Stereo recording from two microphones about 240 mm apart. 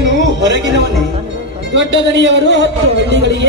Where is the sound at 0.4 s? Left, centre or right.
Right.